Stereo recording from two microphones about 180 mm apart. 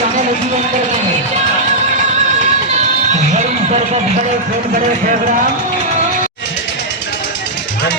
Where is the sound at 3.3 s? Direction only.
40° right (ahead or behind).